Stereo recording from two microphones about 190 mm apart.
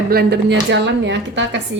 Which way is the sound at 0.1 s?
60° right (ahead or behind).